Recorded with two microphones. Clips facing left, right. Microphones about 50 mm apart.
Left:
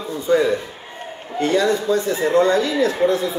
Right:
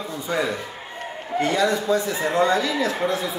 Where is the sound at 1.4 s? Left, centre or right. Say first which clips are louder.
Left 4 dB; left.